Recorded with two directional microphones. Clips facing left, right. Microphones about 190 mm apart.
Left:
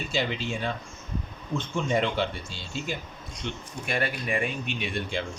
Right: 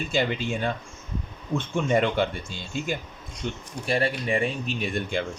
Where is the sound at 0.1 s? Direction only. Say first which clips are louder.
Right 3 dB; 50° right (ahead or behind).